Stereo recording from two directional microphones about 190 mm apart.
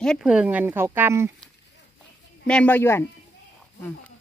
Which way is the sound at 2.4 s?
5° left (ahead or behind).